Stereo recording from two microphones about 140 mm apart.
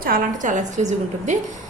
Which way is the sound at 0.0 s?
80° right.